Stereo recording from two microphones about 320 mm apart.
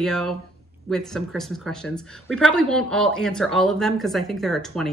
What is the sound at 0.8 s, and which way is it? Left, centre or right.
Speech, centre.